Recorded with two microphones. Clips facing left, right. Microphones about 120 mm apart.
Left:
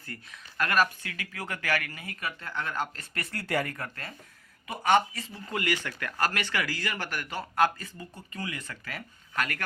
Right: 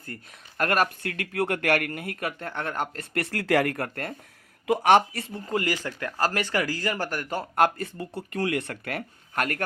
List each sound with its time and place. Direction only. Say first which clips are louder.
0.0 s speech: right 3 dB; 45° right (ahead or behind)
4.6 s speech: right 5 dB; 75° right (ahead or behind); by 5.4 s 60° right (ahead or behind)
5.5 s a man's voice: right 3 dB; 35° right (ahead or behind); by 9.6 s 50° right (ahead or behind)